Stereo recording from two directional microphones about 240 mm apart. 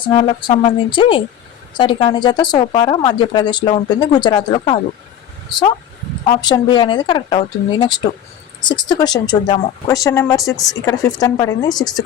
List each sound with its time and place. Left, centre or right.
0.0 s speech: centre
6.4 s speech: centre